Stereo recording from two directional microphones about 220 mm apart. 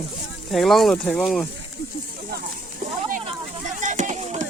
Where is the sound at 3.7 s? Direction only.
35° right (ahead or behind).